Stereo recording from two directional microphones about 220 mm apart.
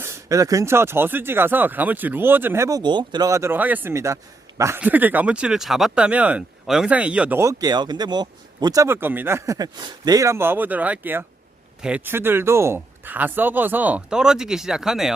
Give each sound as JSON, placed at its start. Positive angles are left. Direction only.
{"t": 0.0, "sound": "speech", "side_deg": -15}